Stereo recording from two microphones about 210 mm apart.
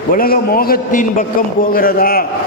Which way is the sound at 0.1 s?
45° left (ahead or behind).